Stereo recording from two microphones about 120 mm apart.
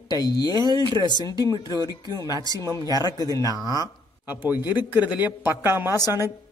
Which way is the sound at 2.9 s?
30° left (ahead or behind).